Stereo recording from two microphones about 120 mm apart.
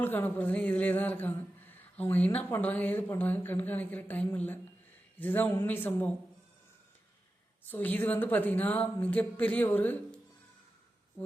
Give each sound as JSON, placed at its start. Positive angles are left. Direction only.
{"t": 0.0, "sound": "speech", "side_deg": 15}
{"t": 7.6, "sound": "speech", "side_deg": 15}